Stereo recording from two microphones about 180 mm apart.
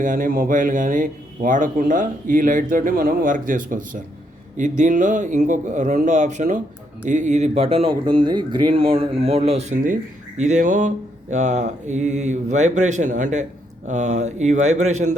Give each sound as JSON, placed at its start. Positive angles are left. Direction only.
{"t": 0.0, "sound": "a man's voice", "side_deg": -50}